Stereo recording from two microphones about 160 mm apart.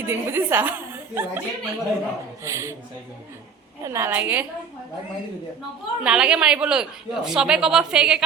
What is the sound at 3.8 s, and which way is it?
Speech, 15° right (ahead or behind).